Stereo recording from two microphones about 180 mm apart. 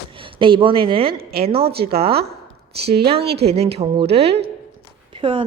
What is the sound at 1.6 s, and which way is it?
Speech, 60° right (ahead or behind).